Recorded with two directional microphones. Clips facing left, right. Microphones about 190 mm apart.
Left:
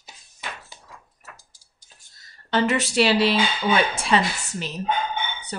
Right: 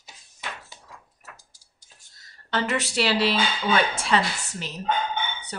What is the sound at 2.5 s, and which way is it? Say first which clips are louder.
A woman's voice: left 5 dB; 20° left (ahead or behind).